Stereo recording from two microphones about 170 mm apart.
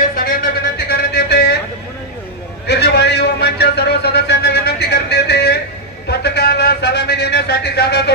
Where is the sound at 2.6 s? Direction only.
75° left (ahead or behind).